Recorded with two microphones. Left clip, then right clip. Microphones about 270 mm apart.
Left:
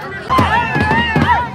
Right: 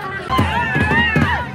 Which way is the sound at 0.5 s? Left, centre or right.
Centre.